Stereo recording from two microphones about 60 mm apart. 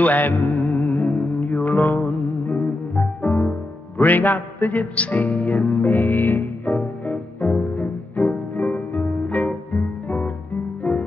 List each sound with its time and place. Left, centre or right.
0.0 s music: left
3.3 s music: centre
4.0 s music: left
10.8 s music: left